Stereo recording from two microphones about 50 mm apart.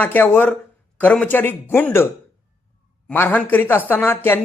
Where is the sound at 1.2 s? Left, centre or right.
Left.